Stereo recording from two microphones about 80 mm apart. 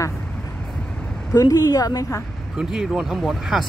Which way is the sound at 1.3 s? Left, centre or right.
Left.